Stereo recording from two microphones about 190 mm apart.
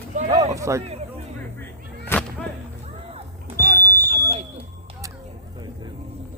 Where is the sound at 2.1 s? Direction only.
10° left (ahead or behind).